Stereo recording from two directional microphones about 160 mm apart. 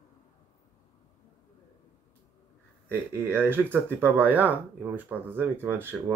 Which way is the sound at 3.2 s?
15° right (ahead or behind).